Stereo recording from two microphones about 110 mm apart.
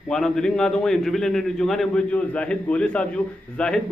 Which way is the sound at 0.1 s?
5° left (ahead or behind).